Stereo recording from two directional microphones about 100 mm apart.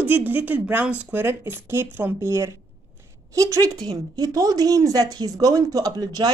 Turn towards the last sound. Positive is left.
turn(degrees=-40)  # may be behind; listen again after turning